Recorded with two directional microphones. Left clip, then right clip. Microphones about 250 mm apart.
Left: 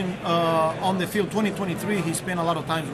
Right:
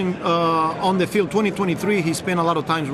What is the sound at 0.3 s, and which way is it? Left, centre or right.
Speech, left.